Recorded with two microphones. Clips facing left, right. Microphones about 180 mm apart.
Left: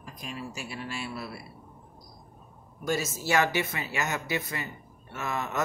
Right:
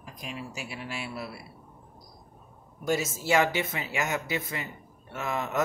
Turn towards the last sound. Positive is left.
turn(degrees=-15)  # may be behind; listen again after turning